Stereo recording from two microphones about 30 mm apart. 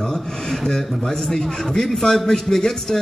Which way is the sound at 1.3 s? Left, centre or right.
Centre.